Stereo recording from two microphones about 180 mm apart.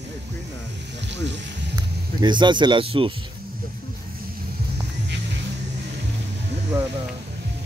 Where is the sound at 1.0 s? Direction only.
75° right (ahead or behind).